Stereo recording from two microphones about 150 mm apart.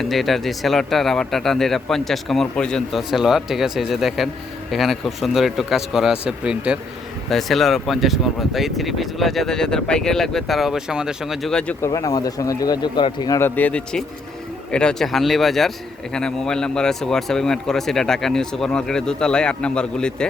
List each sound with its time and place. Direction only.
0.0 s speech: centre (ahead or behind)
11.9 s speech: 25° left (ahead or behind)
13.4 s speech: 10° left (ahead or behind)